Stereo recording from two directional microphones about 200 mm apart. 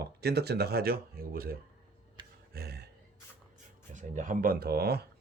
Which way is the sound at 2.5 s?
55° right (ahead or behind).